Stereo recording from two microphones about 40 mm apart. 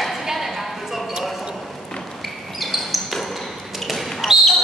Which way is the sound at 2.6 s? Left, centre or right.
Centre.